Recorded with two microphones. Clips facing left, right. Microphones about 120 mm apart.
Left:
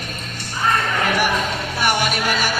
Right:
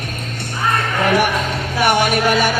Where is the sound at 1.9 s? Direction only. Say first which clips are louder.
Right 6 dB; 50° right (ahead or behind).